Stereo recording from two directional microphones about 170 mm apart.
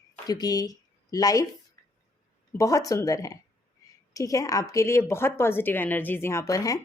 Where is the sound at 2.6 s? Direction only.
20° left (ahead or behind).